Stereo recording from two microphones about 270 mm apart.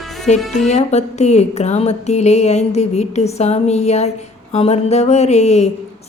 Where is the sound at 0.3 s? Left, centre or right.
Left.